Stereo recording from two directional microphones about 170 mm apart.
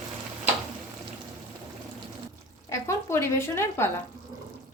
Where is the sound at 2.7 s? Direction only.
15° left (ahead or behind).